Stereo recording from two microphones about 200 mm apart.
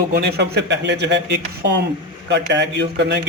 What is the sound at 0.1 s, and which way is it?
A man's voice, 55° right (ahead or behind).